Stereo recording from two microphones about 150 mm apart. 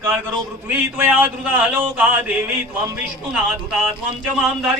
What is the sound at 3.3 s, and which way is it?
Speech, 5° right (ahead or behind).